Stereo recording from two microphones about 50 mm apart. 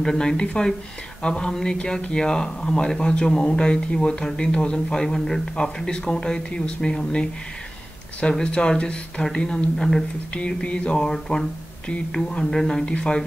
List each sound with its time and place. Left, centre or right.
0.0 s speech: centre
10.3 s a sound: centre
12.3 s speech: centre